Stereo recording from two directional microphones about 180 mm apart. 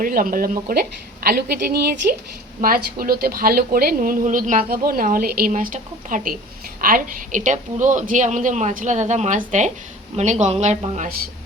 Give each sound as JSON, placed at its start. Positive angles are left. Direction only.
{"t": 0.0, "sound": "a woman's voice", "side_deg": -50}